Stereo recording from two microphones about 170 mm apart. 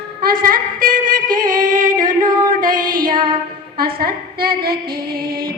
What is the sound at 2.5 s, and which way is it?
Female singing, 50° right (ahead or behind).